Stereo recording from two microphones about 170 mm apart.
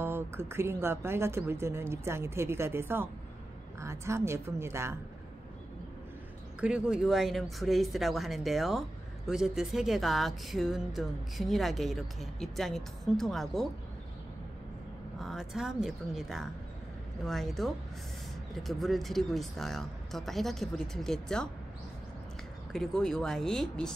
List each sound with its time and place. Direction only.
0.0 s speech: 15° right (ahead or behind)
6.6 s speech: 5° right (ahead or behind)
15.1 s speech: centre (ahead or behind)
22.7 s speech: 5° left (ahead or behind)